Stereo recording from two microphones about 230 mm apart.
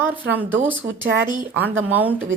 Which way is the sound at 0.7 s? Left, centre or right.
Right.